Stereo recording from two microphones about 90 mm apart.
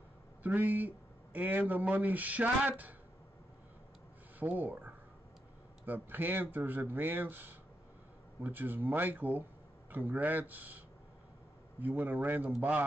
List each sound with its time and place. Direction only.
0.4 s speech: 20° right (ahead or behind)
4.4 s speech: 20° right (ahead or behind)
11.8 s speech: 20° right (ahead or behind)